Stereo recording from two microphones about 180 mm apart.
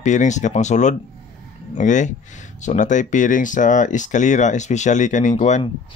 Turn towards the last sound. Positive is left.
turn(degrees=40)  # may be behind; listen again after turning